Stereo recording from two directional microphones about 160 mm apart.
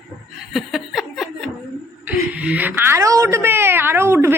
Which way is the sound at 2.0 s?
10° right (ahead or behind).